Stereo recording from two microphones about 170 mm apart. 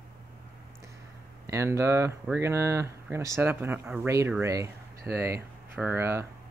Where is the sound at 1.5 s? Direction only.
15° right (ahead or behind).